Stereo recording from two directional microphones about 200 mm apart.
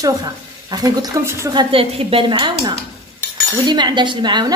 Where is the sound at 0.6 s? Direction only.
20° right (ahead or behind).